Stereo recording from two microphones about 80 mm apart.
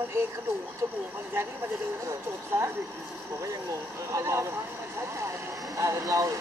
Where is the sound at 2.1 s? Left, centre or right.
Right.